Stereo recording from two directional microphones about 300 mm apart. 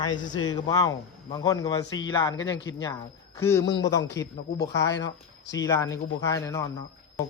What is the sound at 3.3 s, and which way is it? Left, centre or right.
Speech, centre.